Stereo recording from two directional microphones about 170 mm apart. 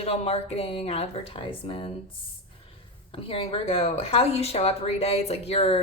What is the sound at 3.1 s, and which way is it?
A woman's voice, 35° left (ahead or behind).